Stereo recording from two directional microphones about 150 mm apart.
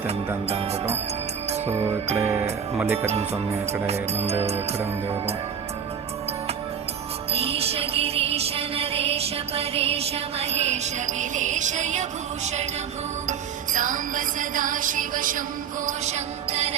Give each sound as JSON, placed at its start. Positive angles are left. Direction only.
{"t": 0.4, "sound": "music", "side_deg": -45}
{"t": 7.3, "sound": "music", "side_deg": -40}
{"t": 13.2, "sound": "music", "side_deg": -55}
{"t": 15.9, "sound": "music", "side_deg": -50}